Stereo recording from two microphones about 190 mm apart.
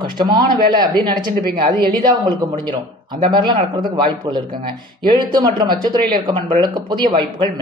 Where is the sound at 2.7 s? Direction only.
25° right (ahead or behind).